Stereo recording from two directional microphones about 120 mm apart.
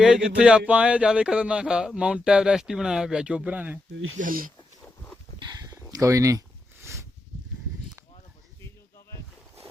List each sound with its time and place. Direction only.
0.0 s speech: 5° right (ahead or behind)
4.2 s speech: 90° right
5.5 s a sound: 35° right (ahead or behind)